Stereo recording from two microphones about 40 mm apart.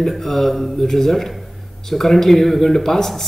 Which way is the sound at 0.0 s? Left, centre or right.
Centre.